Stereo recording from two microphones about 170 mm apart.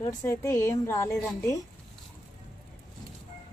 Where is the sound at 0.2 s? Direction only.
15° left (ahead or behind).